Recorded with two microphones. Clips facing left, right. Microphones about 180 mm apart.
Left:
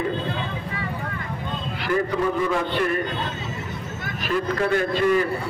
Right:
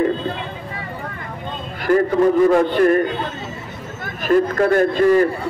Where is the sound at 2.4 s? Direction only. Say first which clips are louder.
Right 9 dB; 45° right (ahead or behind).